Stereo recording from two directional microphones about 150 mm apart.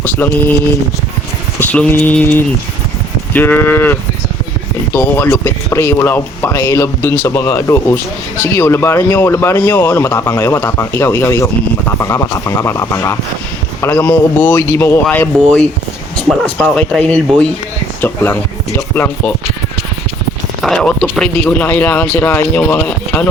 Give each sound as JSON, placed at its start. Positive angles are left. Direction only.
{"t": 0.0, "sound": "speech", "side_deg": 10}
{"t": 1.5, "sound": "speech", "side_deg": 10}
{"t": 20.6, "sound": "speech", "side_deg": 0}